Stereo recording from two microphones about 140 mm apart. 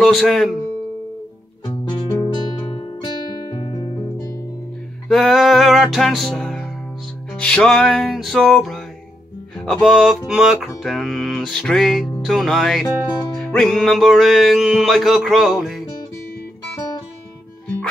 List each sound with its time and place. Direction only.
0.0 s music: centre (ahead or behind)
2.0 s music: 15° left (ahead or behind)
2.7 s music: 30° left (ahead or behind)
5.0 s music: centre (ahead or behind)